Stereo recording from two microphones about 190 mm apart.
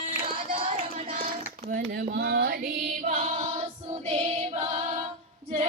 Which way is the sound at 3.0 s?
40° right (ahead or behind).